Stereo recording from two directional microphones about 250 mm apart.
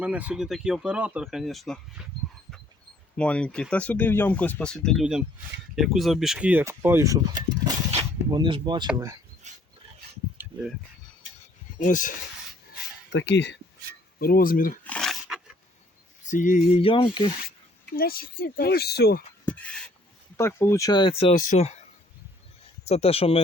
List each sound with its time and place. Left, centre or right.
0.0 s speech: centre
3.2 s speech: centre
9.5 s filing: right
11.8 s speech: left
13.1 s speech: left
14.8 s dog: centre
16.2 s speech: left
17.9 s speech: left
19.5 s a sound: centre
20.3 s speech: centre; by 21.8 s left
22.9 s speech: left